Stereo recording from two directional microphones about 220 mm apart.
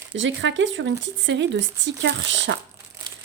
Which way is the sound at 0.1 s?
55° right (ahead or behind).